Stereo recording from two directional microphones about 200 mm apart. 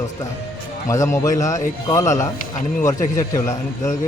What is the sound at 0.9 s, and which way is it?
A man's voice, 15° left (ahead or behind).